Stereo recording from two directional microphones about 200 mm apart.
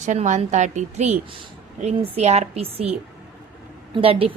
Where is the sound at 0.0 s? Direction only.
35° right (ahead or behind).